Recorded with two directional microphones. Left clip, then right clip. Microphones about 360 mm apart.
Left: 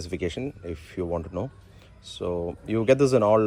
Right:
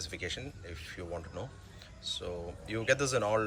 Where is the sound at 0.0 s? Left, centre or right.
Centre.